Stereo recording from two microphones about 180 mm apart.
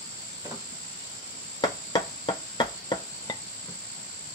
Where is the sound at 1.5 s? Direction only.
25° left (ahead or behind).